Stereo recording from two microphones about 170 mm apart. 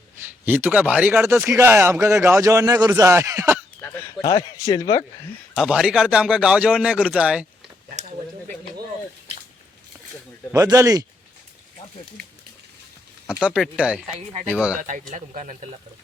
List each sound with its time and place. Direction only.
0.4 s a man's voice: 10° right (ahead or behind)
4.3 s speech: 20° left (ahead or behind)
5.5 s a man's voice: 5° right (ahead or behind)
10.5 s speech: 20° right (ahead or behind)
13.2 s a man's voice: 5° right (ahead or behind)
14.8 s speech: 50° right (ahead or behind)